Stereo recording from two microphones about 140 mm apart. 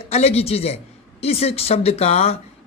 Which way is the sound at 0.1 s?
50° left (ahead or behind).